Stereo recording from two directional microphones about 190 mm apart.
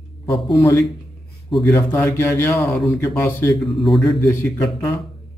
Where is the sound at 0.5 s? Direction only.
15° left (ahead or behind).